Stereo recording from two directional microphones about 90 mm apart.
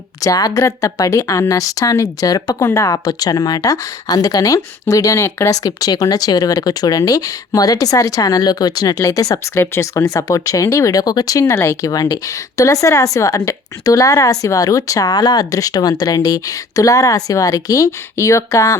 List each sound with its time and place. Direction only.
0.2 s speech: 40° left (ahead or behind)
2.6 s speech: 30° left (ahead or behind)
3.1 s speech: 45° left (ahead or behind)